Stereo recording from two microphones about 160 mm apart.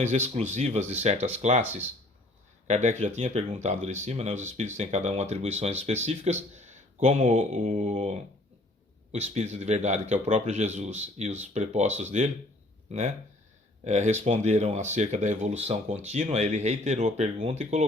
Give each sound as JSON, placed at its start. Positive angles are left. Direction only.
{"t": 0.5, "sound": "speech", "side_deg": -45}
{"t": 2.6, "sound": "speech", "side_deg": -45}
{"t": 9.1, "sound": "speech", "side_deg": -45}
{"t": 13.8, "sound": "speech", "side_deg": -45}